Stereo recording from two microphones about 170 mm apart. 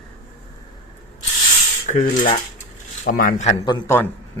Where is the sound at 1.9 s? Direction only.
50° left (ahead or behind).